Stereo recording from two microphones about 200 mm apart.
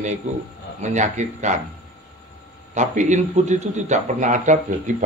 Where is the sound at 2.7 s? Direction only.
35° right (ahead or behind).